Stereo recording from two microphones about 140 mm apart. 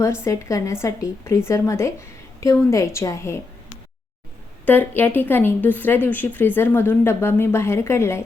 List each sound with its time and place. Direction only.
0.0 s a woman's voice: 20° left (ahead or behind)
4.6 s a woman's voice: 15° left (ahead or behind)